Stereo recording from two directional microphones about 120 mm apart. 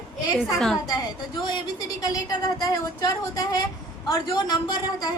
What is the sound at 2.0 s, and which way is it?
A woman's voice, 30° left (ahead or behind).